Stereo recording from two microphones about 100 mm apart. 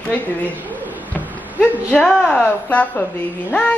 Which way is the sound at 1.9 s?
5° left (ahead or behind).